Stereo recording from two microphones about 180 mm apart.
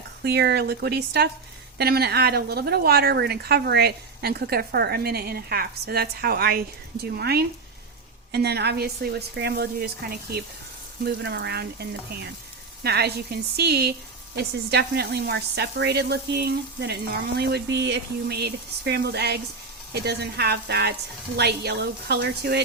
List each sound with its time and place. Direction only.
0.2 s a woman's voice: 65° right (ahead or behind)